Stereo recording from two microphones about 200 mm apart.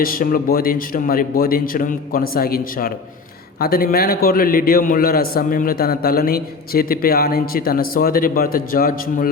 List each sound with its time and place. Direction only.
0.0 s a man's voice: 45° left (ahead or behind)